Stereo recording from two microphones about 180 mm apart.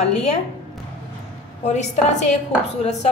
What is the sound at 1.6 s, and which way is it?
A woman's voice, 40° left (ahead or behind).